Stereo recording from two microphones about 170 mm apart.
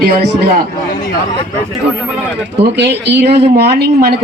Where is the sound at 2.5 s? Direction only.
80° right.